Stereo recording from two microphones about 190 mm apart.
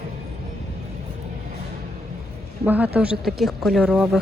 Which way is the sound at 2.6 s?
10° right (ahead or behind).